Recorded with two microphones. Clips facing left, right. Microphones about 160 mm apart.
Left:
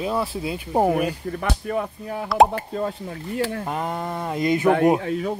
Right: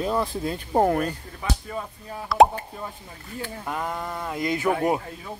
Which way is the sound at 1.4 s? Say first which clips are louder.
Left 5 dB; 60° left (ahead or behind).